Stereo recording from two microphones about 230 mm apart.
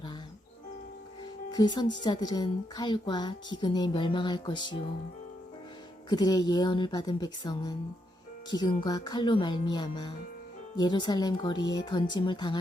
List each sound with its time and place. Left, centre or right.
1.5 s speech: centre
6.1 s a woman's voice: centre